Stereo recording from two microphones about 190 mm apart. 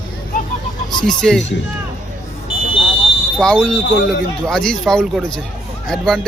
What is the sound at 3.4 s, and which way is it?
Speech, 5° left (ahead or behind).